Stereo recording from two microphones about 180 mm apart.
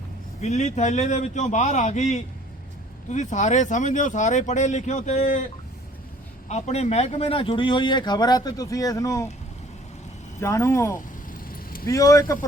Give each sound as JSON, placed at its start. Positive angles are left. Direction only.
{"t": 0.4, "sound": "speech", "side_deg": 40}
{"t": 6.5, "sound": "speech", "side_deg": 40}
{"t": 10.4, "sound": "speech", "side_deg": 15}
{"t": 11.5, "sound": "vehicle", "side_deg": 55}
{"t": 11.9, "sound": "speech", "side_deg": 15}